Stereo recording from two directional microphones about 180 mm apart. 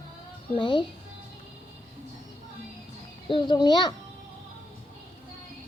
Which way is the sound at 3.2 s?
25° left (ahead or behind).